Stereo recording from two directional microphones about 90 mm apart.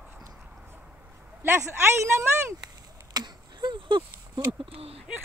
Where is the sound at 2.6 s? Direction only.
50° right (ahead or behind); by 4.9 s 90° right.